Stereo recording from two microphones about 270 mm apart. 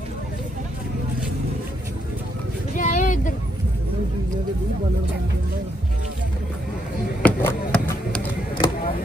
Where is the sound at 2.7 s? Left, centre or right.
Left.